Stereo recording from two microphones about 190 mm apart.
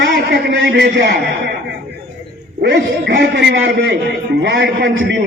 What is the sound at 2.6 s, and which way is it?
A man's voice, 60° right (ahead or behind).